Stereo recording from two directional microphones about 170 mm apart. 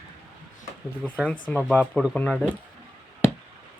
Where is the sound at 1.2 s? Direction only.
5° left (ahead or behind).